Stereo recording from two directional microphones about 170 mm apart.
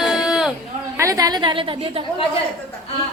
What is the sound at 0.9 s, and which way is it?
A woman's voice, 20° right (ahead or behind).